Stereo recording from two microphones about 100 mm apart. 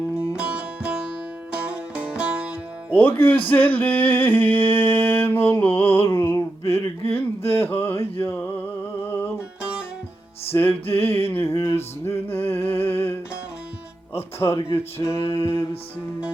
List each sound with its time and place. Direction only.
0.3 s music: 10° right (ahead or behind)
2.9 s speech: 20° left (ahead or behind)
3.5 s music: 15° left (ahead or behind)
7.4 s a sound: 25° left (ahead or behind)
8.2 s music: 20° left (ahead or behind)
10.5 s music: 20° left (ahead or behind)
12.0 s a sound: 25° left (ahead or behind)
14.1 s speech: 25° left (ahead or behind)
15.3 s music: 25° left (ahead or behind)